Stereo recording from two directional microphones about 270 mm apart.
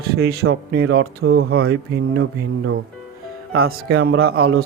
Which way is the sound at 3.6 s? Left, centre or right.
Right.